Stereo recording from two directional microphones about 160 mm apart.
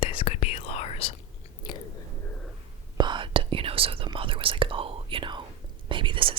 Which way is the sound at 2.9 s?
30° right (ahead or behind).